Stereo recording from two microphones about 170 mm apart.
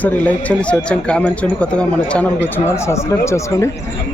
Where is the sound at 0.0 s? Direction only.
10° left (ahead or behind).